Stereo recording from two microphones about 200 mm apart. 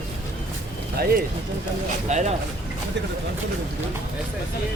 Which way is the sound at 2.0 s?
35° right (ahead or behind).